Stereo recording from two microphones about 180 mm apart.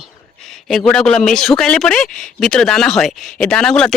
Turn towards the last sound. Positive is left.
turn(degrees=0)  # may be behind; listen again after turning